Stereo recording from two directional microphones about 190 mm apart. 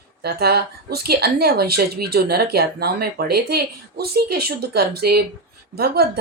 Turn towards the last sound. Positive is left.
turn(degrees=-55)  # may be behind; listen again after turning